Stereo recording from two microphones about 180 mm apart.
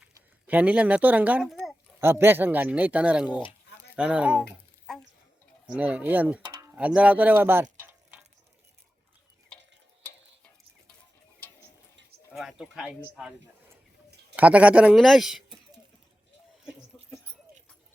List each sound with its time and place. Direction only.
0.0 s a child's voice: 10° right (ahead or behind)
2.0 s speech: 15° right (ahead or behind)
6.5 s a sound: 20° right (ahead or behind)
6.7 s speech: 5° right (ahead or behind)
12.3 s speech: centre (ahead or behind)
14.3 s speech: 10° right (ahead or behind)
16.9 s dog: centre (ahead or behind)